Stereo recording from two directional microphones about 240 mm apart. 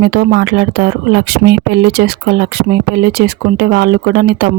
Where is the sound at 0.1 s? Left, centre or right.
Right.